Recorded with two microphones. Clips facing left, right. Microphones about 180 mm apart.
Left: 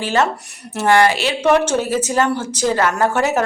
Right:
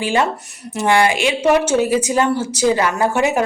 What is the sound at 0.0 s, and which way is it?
Speech, 10° right (ahead or behind).